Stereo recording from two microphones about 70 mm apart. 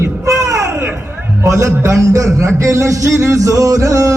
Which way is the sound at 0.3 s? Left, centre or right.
Right.